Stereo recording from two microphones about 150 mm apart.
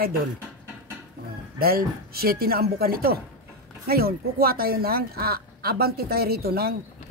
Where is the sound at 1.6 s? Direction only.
90° right.